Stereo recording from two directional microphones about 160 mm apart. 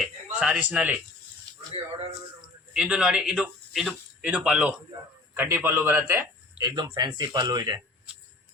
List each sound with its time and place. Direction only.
0.0 s speech: 5° right (ahead or behind)
1.7 s speech: 35° right (ahead or behind)
2.7 s speech: 5° right (ahead or behind)
4.9 s speech: 25° right (ahead or behind)
5.4 s speech: 15° right (ahead or behind)